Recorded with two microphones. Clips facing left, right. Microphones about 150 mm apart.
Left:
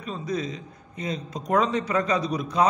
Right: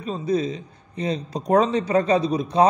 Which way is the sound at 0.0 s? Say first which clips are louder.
Right 6 dB; 30° right (ahead or behind).